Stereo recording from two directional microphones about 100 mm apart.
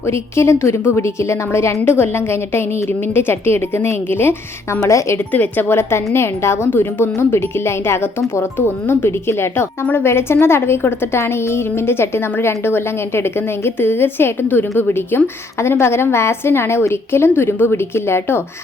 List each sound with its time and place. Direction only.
0.0 s a woman's voice: 25° left (ahead or behind)
5.3 s a woman's voice: 20° left (ahead or behind)